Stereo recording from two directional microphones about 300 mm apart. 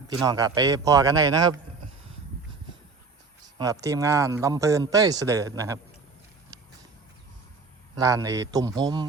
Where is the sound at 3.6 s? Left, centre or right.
Centre.